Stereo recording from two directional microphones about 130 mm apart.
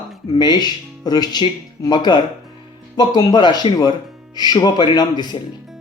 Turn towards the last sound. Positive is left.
turn(degrees=35)  # may be behind; listen again after turning